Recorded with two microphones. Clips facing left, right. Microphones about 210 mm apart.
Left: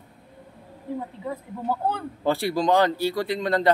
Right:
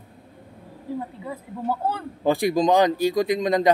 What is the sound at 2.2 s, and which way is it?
Speech, 15° right (ahead or behind).